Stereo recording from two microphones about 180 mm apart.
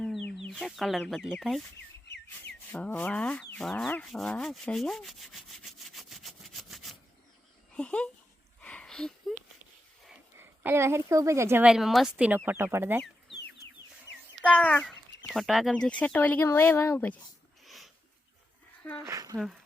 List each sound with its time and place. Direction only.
0.0 s speech: centre (ahead or behind)
2.0 s whistle: 70° left (ahead or behind)
2.5 s rub: 5° left (ahead or behind)
7.7 s speech: 5° left (ahead or behind)
8.6 s a sound: 5° left (ahead or behind)
10.3 s a woman's voice: 10° right (ahead or behind)
13.3 s chicken: 70° left (ahead or behind)
14.4 s speech: 10° left (ahead or behind)
17.7 s a sound: centre (ahead or behind)
19.0 s speech: 20° right (ahead or behind)